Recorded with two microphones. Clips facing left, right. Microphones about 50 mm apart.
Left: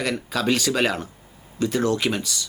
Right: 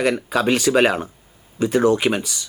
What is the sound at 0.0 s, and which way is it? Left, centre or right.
Speech, centre.